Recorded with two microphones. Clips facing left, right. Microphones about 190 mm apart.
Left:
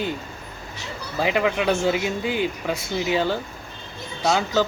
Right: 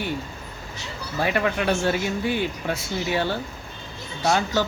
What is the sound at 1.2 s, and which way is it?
Speech, 15° left (ahead or behind).